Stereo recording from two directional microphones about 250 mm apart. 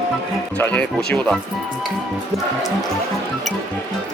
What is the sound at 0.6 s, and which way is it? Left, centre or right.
Speech, centre.